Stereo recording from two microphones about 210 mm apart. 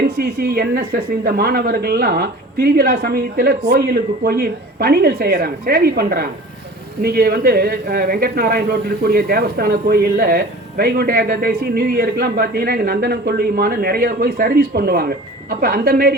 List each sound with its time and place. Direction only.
0.0 s speech: 50° right (ahead or behind)